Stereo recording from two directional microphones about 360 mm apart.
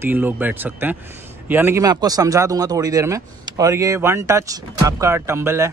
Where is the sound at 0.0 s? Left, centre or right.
Centre.